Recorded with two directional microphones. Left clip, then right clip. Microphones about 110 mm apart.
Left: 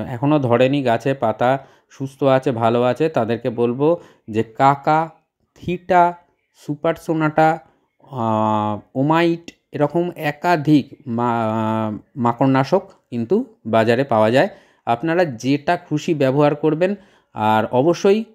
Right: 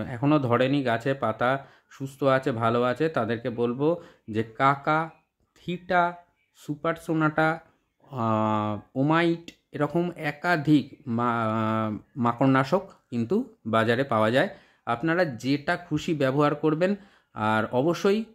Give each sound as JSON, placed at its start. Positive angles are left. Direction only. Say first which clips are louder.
{"t": 0.3, "sound": "speech", "louder": "left 7 dB", "side_deg": 25}
{"t": 8.1, "sound": "speech", "louder": "left 7 dB", "side_deg": 25}
{"t": 9.8, "sound": "speech", "louder": "left 7 dB", "side_deg": 10}
{"t": 10.1, "sound": "speech", "louder": "left 7 dB", "side_deg": 35}